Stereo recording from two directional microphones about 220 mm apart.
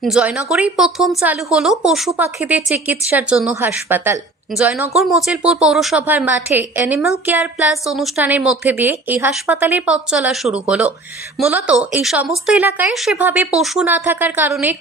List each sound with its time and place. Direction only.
0.0 s a woman's voice: 5° right (ahead or behind)